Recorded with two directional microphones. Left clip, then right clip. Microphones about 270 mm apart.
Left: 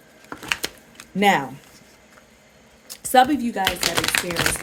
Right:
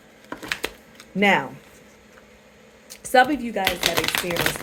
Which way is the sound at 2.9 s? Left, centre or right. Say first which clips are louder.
Left 1 dB; left.